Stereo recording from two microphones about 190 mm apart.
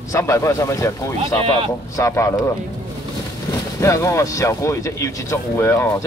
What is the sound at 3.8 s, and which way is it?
Speech, 15° left (ahead or behind).